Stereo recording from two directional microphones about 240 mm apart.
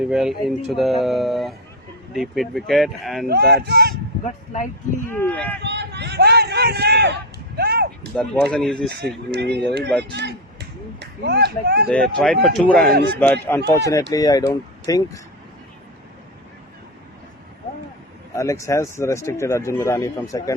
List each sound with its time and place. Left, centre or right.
0.0 s speech: centre
3.5 s speech: right
4.2 s speech: left
5.0 s speech: centre
5.6 s a sound: right
8.1 s speech: centre
9.3 s speech: right
11.9 s speech: centre
18.3 s speech: centre